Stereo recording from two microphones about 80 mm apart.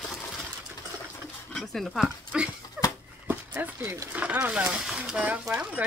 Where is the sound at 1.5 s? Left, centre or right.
Centre.